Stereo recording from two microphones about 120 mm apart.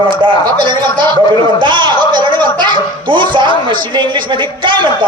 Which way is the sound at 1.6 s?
40° right (ahead or behind).